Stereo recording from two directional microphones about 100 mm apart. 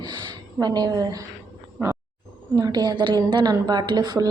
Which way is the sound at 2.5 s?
40° right (ahead or behind).